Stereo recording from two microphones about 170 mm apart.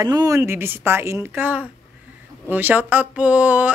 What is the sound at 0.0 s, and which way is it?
Speech, 20° right (ahead or behind).